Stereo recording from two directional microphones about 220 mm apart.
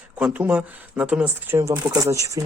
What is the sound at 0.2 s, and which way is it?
Speech, 5° right (ahead or behind).